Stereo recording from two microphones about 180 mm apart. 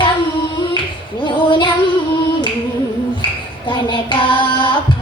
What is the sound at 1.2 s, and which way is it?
Female singing, 25° left (ahead or behind).